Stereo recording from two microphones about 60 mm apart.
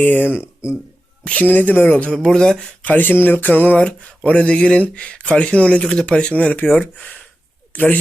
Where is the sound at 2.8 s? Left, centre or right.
Left.